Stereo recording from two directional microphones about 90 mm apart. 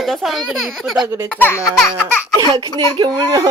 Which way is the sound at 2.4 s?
40° right (ahead or behind).